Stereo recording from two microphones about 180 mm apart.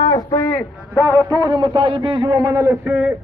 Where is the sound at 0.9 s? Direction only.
15° right (ahead or behind).